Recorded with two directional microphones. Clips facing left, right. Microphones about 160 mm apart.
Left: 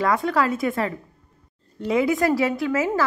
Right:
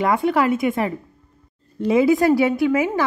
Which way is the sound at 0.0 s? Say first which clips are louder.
Right 3 dB; 20° right (ahead or behind).